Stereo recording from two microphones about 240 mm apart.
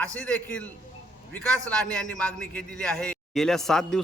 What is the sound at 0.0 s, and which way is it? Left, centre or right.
A man's voice, centre.